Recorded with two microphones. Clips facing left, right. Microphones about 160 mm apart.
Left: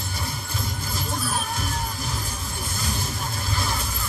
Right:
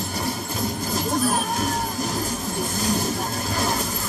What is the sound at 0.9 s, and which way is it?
Music, 40° right (ahead or behind).